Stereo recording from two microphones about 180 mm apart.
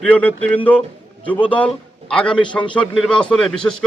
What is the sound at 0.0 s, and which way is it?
A man's voice, 10° left (ahead or behind).